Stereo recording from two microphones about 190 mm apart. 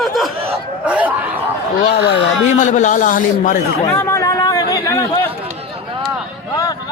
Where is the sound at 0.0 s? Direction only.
Centre (ahead or behind).